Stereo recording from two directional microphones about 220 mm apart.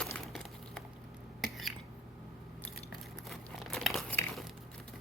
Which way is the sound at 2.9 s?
Centre (ahead or behind).